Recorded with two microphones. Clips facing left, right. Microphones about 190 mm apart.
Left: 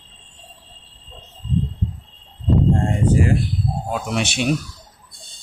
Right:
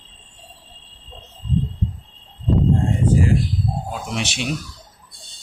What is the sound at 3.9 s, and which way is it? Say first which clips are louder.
Speech: left 4 dB; 60° left (ahead or behind).